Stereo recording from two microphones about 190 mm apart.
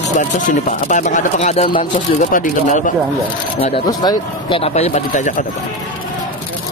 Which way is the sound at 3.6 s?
30° left (ahead or behind).